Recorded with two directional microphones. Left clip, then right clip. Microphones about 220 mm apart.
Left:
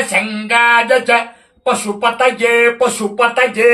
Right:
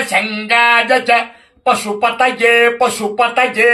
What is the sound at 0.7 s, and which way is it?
Music, centre (ahead or behind).